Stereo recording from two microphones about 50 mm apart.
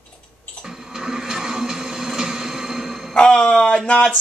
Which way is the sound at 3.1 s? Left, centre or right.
Centre.